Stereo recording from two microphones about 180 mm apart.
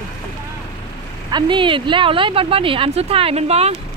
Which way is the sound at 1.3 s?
25° right (ahead or behind).